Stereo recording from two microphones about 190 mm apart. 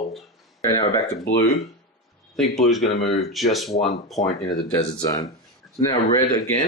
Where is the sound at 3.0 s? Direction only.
Centre (ahead or behind).